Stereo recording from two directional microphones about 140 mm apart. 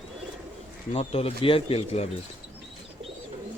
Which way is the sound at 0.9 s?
45° left (ahead or behind).